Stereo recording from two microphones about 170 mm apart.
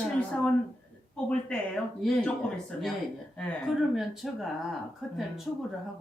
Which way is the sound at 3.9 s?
Centre (ahead or behind).